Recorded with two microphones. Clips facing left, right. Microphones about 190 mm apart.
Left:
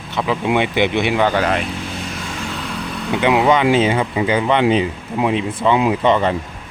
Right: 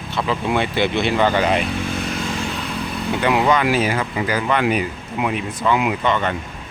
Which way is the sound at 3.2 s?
20° left (ahead or behind).